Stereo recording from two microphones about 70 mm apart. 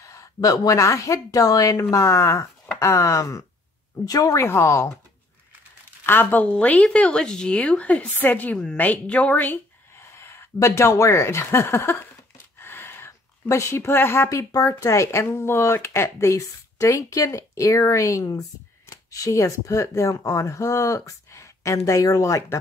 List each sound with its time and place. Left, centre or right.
0.0 s a woman's voice: left
1.9 s speech: left
4.0 s speech: left
4.5 s speech: left
6.0 s speech: left; by 8.1 s centre
8.2 s a woman's voice: left
9.9 s speech: left
12.5 s a sound: left
14.3 s speech: left